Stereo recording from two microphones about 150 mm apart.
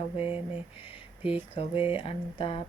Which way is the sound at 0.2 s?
10° right (ahead or behind).